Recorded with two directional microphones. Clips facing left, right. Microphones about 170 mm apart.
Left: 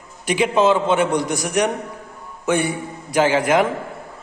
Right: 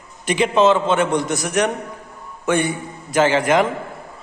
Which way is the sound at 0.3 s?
10° left (ahead or behind).